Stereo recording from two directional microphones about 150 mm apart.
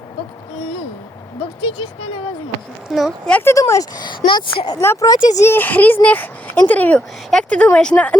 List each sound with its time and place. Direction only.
2.9 s speech: 5° left (ahead or behind)
3.5 s speech: 20° left (ahead or behind)
4.8 s speech: 20° left (ahead or behind)
5.4 s speech: 15° left (ahead or behind)